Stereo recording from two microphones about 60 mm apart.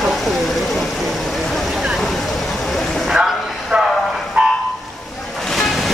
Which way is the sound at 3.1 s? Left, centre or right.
Centre.